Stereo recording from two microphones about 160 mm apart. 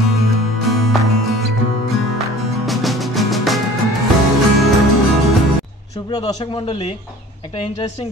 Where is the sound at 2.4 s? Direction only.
Centre (ahead or behind).